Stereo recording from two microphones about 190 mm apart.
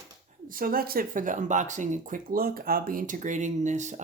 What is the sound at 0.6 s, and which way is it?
Speech, 50° right (ahead or behind).